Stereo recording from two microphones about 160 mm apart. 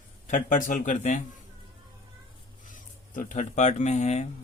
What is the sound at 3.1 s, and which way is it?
Speech, 50° left (ahead or behind).